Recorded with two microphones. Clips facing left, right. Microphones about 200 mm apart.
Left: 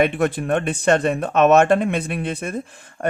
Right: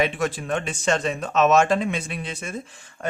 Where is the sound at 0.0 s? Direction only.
60° left (ahead or behind).